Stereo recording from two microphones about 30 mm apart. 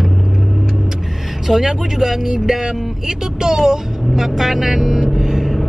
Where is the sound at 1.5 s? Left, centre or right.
Centre.